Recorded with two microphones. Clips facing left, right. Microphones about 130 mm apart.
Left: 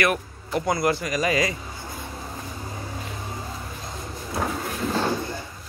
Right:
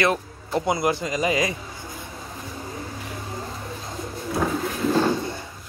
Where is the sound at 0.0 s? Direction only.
25° right (ahead or behind).